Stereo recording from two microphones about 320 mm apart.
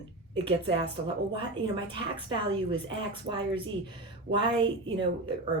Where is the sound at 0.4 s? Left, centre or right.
Centre.